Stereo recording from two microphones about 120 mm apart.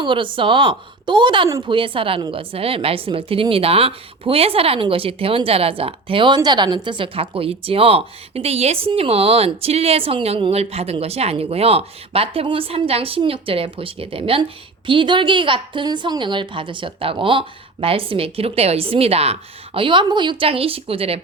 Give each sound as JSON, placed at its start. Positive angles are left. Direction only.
{"t": 0.0, "sound": "speech", "side_deg": -45}